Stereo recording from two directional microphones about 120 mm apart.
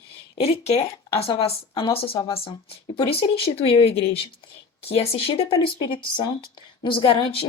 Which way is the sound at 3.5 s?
50° left (ahead or behind).